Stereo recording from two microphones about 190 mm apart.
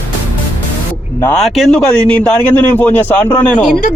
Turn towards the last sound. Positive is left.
turn(degrees=10)  # may be behind; listen again after turning